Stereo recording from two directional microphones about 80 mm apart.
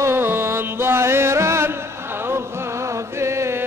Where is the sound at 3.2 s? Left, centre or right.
Right.